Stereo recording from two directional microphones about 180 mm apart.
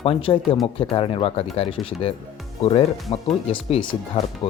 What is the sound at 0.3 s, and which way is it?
Speech, 20° left (ahead or behind).